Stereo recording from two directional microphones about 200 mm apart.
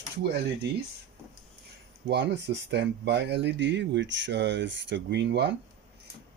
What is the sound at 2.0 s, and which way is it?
Speech, 60° right (ahead or behind).